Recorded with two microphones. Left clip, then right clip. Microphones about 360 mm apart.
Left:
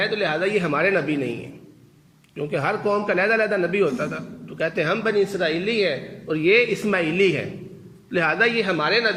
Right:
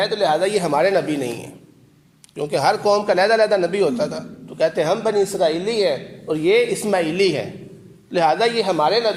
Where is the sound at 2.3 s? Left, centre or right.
Right.